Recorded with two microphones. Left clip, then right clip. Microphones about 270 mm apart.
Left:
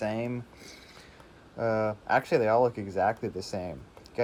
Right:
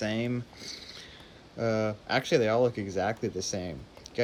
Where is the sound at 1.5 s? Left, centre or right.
Left.